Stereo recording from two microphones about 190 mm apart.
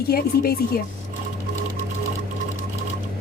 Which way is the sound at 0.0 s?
55° left (ahead or behind).